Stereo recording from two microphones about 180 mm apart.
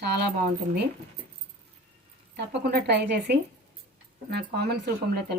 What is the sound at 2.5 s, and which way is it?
A woman's voice, 65° right (ahead or behind).